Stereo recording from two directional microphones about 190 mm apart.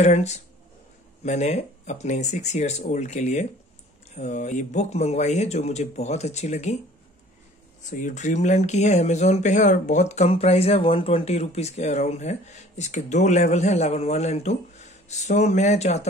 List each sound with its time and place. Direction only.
0.0 s speech: 35° left (ahead or behind)
7.8 s speech: 40° left (ahead or behind)